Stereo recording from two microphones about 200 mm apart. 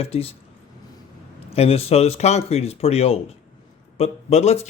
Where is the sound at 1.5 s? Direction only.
30° left (ahead or behind).